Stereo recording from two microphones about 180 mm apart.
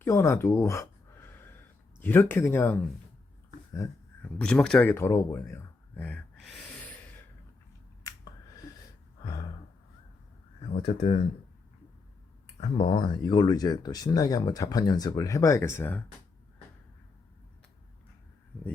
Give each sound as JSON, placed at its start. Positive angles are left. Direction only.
{"t": 0.0, "sound": "a sound", "side_deg": 15}
{"t": 2.0, "sound": "speech", "side_deg": 10}
{"t": 6.3, "sound": "gasp", "side_deg": 0}
{"t": 10.9, "sound": "speech", "side_deg": 40}
{"t": 12.5, "sound": "speech", "side_deg": 35}